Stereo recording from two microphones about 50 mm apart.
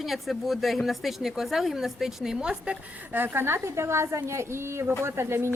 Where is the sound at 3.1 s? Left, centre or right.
Right.